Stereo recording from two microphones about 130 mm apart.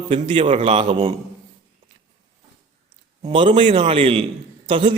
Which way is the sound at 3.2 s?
40° right (ahead or behind).